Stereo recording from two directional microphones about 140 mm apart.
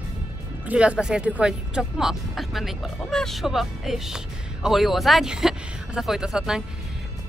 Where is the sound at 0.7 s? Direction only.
10° right (ahead or behind).